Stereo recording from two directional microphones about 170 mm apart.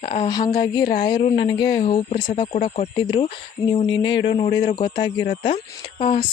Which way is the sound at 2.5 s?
45° left (ahead or behind).